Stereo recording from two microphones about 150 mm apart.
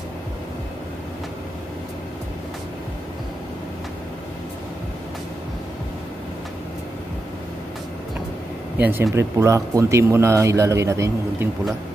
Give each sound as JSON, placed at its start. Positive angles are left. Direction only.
{"t": 8.7, "sound": "speech", "side_deg": -10}